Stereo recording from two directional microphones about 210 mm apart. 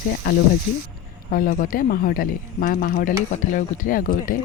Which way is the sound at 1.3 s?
40° left (ahead or behind).